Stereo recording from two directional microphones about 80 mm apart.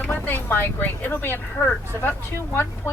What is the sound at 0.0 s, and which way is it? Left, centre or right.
A woman's voice, left.